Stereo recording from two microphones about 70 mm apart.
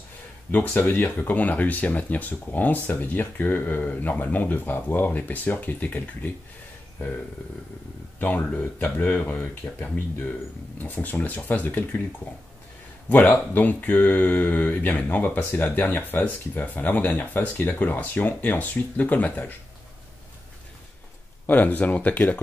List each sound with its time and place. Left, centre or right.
0.5 s speech: left
8.2 s speech: left
13.5 s speech: left
21.5 s speech: left